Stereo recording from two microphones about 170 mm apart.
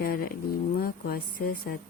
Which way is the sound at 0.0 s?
60° left (ahead or behind).